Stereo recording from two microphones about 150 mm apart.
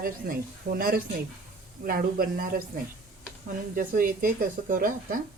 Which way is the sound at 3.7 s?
65° right (ahead or behind).